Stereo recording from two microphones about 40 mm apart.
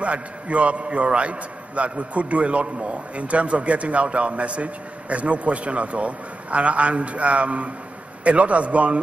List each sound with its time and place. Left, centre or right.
0.0 s a man's voice: right